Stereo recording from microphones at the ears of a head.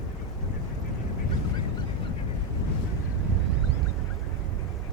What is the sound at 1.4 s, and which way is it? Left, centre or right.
Boat, left.